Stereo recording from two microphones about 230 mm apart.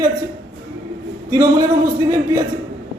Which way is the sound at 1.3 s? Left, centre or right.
Centre.